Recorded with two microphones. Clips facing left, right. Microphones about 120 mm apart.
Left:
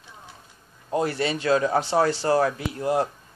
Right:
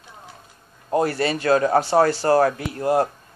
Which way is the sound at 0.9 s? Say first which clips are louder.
Right 4 dB; 50° right (ahead or behind).